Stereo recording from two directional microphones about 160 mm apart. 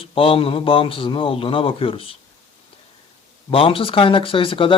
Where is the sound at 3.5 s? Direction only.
35° left (ahead or behind).